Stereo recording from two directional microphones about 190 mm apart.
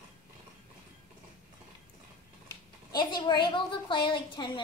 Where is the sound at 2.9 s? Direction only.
20° left (ahead or behind).